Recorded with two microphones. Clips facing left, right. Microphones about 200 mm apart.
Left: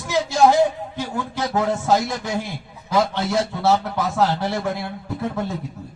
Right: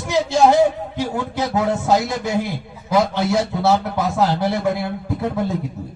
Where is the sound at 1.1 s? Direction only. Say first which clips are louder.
Even; 15° right (ahead or behind).